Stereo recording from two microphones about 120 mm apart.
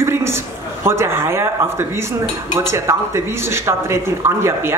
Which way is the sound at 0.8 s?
20° right (ahead or behind).